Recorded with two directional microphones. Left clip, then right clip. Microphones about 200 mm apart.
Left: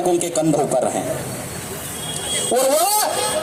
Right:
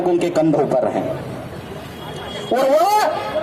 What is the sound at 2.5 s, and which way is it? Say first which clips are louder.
Speech: right 3 dB; centre (ahead or behind).